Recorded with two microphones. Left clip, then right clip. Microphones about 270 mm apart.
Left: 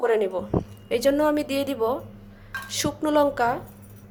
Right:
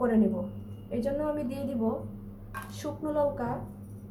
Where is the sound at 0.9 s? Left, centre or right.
Left.